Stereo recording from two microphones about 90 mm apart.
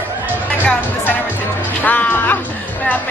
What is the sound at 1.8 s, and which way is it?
Music, 20° left (ahead or behind).